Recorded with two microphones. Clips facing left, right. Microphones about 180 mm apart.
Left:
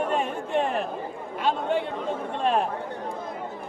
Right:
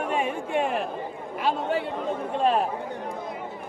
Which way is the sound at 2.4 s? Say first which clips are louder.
Right 1 dB; 5° right (ahead or behind).